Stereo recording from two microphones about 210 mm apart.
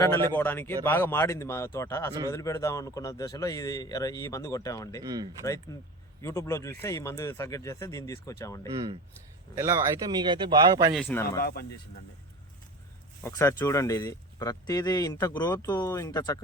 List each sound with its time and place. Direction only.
0.0 s speech: 10° left (ahead or behind)
5.0 s speech: 20° right (ahead or behind)
5.7 s speech: 15° left (ahead or behind)
8.7 s speech: 20° right (ahead or behind)
10.9 s speech: 5° left (ahead or behind)
11.3 s speech: 45° left (ahead or behind)
13.2 s speech: 10° left (ahead or behind)